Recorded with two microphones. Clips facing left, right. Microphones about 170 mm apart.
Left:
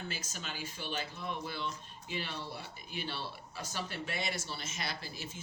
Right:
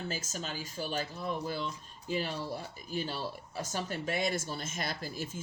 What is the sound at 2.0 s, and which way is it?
Speech, 40° right (ahead or behind).